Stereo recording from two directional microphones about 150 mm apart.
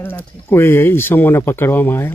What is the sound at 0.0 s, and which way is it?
Speech, 15° left (ahead or behind).